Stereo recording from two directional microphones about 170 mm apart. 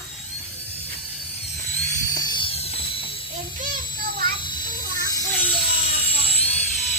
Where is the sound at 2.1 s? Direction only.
30° left (ahead or behind).